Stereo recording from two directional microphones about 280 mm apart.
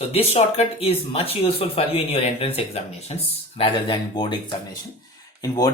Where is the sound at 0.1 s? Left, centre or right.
Left.